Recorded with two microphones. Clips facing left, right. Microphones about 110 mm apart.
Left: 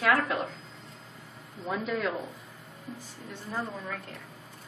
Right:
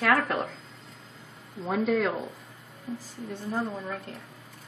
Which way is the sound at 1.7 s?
60° right (ahead or behind).